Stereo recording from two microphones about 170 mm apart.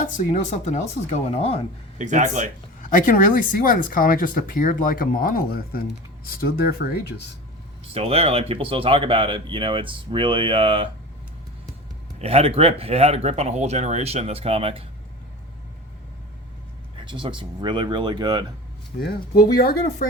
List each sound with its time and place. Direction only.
0.2 s speech: 45° left (ahead or behind)
2.0 s speech: 45° right (ahead or behind)
2.8 s speech: 50° left (ahead or behind)
7.9 s speech: 35° right (ahead or behind)
12.2 s speech: 35° right (ahead or behind)
17.1 s speech: 30° right (ahead or behind)
18.9 s speech: 65° left (ahead or behind)